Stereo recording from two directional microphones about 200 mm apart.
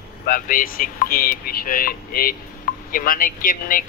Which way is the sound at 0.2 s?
45° left (ahead or behind).